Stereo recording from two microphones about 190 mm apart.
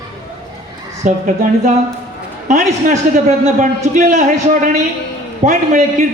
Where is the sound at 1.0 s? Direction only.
45° right (ahead or behind).